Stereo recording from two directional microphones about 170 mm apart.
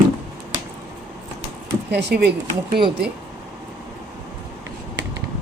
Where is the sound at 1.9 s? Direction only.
80° right.